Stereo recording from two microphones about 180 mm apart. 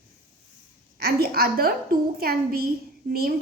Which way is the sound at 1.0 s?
55° right (ahead or behind).